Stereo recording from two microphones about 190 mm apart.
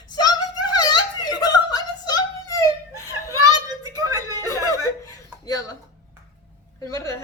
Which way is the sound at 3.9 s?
20° right (ahead or behind).